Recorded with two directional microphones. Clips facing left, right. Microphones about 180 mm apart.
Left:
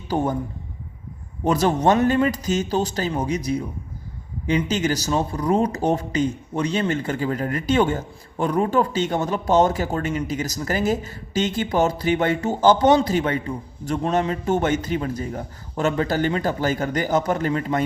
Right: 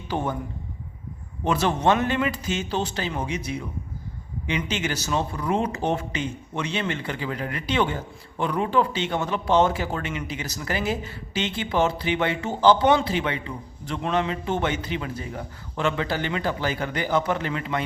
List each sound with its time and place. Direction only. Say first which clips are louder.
0.1 s a man's voice: left 5 dB; 40° left (ahead or behind)
1.5 s a man's voice: left 3 dB; 40° left (ahead or behind)